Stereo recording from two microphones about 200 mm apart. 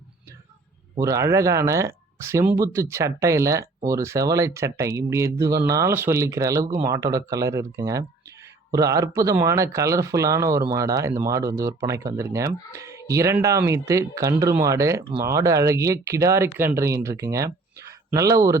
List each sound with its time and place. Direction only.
1.0 s speech: 15° right (ahead or behind)